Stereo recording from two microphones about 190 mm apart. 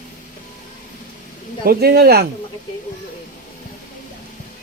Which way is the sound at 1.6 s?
55° right (ahead or behind).